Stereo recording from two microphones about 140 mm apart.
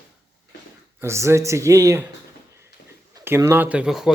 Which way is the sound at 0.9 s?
20° right (ahead or behind).